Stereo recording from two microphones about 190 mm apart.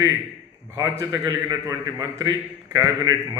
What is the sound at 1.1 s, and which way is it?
A man's voice, 20° right (ahead or behind).